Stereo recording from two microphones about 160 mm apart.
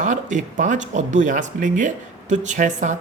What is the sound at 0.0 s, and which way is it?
Speech, 50° right (ahead or behind).